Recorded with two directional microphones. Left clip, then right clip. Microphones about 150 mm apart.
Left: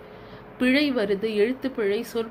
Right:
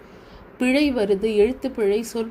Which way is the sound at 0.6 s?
50° right (ahead or behind).